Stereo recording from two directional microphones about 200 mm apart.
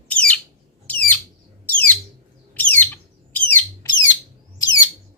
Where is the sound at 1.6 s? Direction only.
10° left (ahead or behind).